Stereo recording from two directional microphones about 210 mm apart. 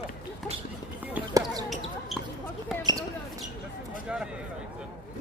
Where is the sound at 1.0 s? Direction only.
10° right (ahead or behind).